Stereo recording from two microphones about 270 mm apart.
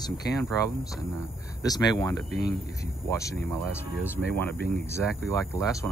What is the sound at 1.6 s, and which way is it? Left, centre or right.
Speech, centre.